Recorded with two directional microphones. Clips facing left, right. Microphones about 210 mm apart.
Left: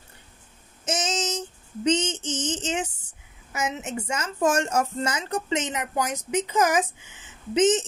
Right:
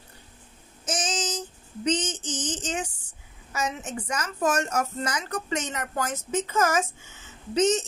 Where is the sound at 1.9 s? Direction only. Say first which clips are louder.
Left 3 dB; 25° left (ahead or behind).